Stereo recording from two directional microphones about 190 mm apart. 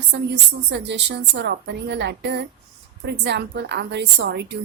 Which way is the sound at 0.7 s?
65° right (ahead or behind).